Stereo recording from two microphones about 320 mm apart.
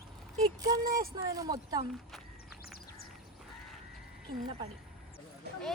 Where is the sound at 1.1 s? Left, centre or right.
Centre.